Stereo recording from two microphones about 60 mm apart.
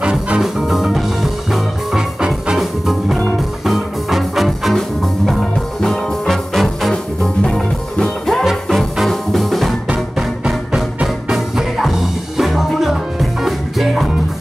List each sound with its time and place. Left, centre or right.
0.0 s music: centre
0.4 s music: centre